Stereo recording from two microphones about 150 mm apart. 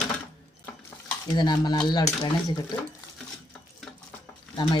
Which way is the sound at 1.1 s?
30° left (ahead or behind).